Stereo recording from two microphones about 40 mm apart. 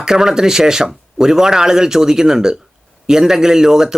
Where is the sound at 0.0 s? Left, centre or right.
Centre.